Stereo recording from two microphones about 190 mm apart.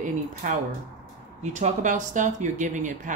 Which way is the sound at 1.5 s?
40° right (ahead or behind).